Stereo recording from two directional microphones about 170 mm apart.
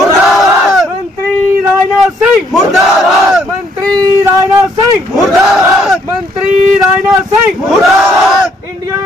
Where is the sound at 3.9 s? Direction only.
20° right (ahead or behind).